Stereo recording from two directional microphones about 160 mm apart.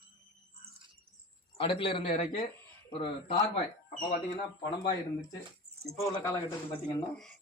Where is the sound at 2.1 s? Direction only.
50° left (ahead or behind).